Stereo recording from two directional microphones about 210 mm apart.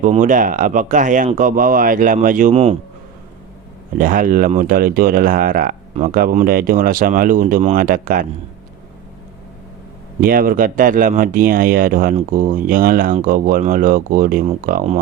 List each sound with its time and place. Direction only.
0.0 s speech: 35° right (ahead or behind)
3.9 s speech: 40° right (ahead or behind)
10.2 s speech: 45° right (ahead or behind)